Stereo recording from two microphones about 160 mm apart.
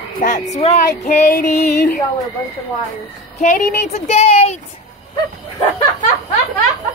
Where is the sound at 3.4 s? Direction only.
45° left (ahead or behind).